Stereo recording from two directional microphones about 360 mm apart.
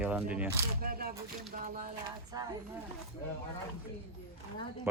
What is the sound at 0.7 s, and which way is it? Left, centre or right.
Speech, right.